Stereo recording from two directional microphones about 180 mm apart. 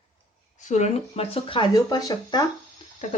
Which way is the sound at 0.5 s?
40° left (ahead or behind).